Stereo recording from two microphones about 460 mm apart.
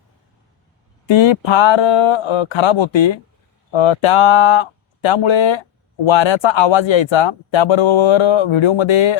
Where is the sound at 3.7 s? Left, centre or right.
Left.